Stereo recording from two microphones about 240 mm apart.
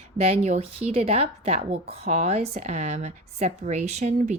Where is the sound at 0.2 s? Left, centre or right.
Right.